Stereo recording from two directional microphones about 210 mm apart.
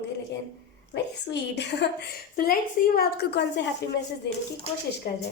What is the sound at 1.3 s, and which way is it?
Speech, 55° left (ahead or behind).